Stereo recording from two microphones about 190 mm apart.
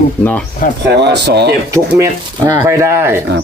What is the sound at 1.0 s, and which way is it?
Speech, 65° right (ahead or behind).